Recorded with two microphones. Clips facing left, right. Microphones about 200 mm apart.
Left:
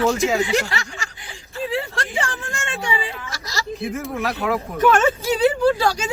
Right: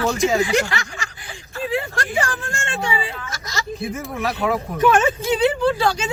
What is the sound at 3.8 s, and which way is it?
Speech, centre (ahead or behind).